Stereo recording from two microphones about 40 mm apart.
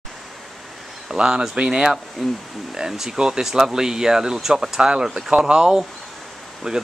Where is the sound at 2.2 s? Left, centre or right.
Centre.